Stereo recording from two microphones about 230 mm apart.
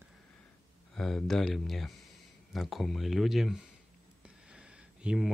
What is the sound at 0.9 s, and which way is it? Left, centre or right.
Speech, centre.